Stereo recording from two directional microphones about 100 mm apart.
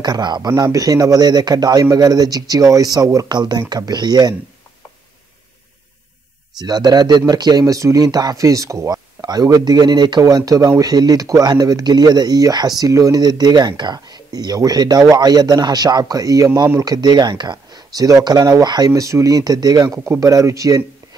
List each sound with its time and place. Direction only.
0.0 s a man's voice: 45° right (ahead or behind)
6.6 s speech: 45° right (ahead or behind)
10.2 s a man's voice: 35° right (ahead or behind)
18.9 s speech: 30° right (ahead or behind)